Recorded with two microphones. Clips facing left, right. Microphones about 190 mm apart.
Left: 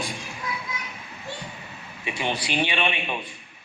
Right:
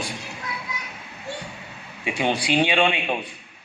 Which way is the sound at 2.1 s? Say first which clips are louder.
Right 5 dB; 65° right (ahead or behind).